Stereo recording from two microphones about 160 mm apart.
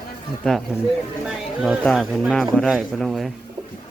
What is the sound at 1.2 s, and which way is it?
Speech, centre (ahead or behind).